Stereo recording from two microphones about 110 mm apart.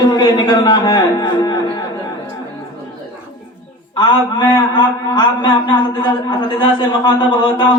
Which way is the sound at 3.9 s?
45° left (ahead or behind).